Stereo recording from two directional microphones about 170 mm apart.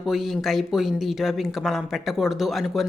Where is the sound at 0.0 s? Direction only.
Centre (ahead or behind).